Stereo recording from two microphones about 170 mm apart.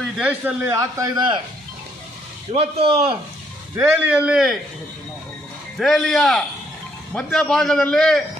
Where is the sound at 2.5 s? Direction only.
35° right (ahead or behind).